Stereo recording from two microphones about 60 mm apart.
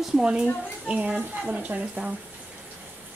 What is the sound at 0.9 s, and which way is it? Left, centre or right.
Speech, right.